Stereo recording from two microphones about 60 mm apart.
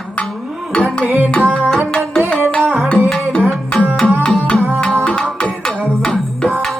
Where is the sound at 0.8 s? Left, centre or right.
Right.